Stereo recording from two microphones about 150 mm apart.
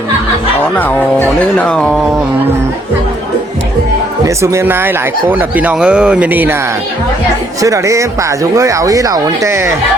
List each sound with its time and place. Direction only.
0.8 s speech: 10° left (ahead or behind)
4.3 s speech: 20° right (ahead or behind)
7.6 s speech: 20° right (ahead or behind)